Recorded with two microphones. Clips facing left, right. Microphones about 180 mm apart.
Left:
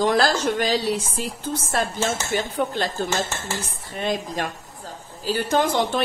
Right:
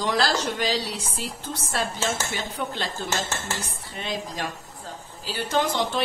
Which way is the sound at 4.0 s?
50° left (ahead or behind).